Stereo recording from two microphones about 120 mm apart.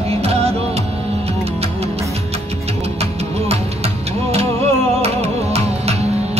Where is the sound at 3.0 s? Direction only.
60° right (ahead or behind).